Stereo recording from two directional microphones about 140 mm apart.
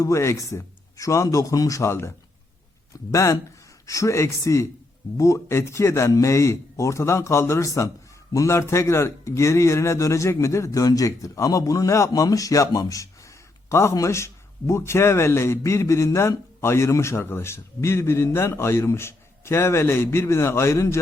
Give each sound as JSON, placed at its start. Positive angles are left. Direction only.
{"t": 0.0, "sound": "a man's voice", "side_deg": 20}